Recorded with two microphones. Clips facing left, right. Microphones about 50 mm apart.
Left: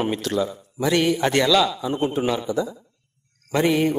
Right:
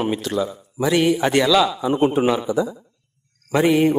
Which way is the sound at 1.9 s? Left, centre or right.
Right.